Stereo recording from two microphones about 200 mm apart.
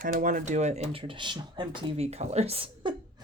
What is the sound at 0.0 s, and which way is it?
Speech, 40° right (ahead or behind).